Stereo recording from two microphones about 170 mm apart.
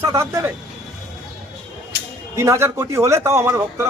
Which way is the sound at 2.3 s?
15° right (ahead or behind).